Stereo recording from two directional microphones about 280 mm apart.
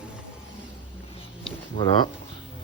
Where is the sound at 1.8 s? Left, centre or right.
Centre.